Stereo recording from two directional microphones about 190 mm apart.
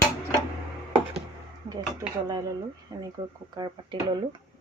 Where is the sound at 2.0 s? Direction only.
15° right (ahead or behind).